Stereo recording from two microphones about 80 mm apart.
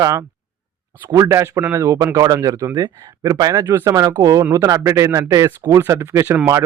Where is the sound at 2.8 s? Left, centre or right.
Right.